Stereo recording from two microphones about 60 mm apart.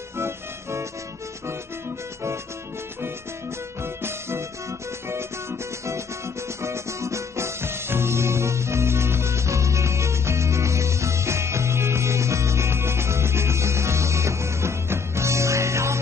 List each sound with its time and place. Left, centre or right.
0.2 s music: right
3.8 s music: right